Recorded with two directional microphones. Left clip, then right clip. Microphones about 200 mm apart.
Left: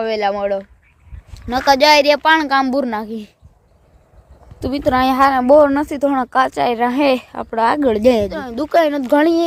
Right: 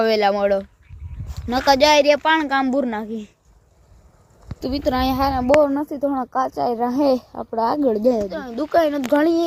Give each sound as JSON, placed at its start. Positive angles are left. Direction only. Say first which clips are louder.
{"t": 0.0, "sound": "speech", "louder": "right 1 dB", "side_deg": -25}
{"t": 1.3, "sound": "speech", "louder": "left 3 dB", "side_deg": -5}
{"t": 4.6, "sound": "speech", "louder": "left 5 dB", "side_deg": 10}
{"t": 5.4, "sound": "a woman's voice", "louder": "left 2 dB", "side_deg": 25}
{"t": 6.1, "sound": "speech", "louder": "left 6 dB", "side_deg": 35}